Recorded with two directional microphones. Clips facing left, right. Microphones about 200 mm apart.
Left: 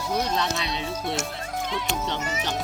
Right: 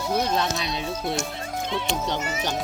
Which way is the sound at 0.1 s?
5° right (ahead or behind).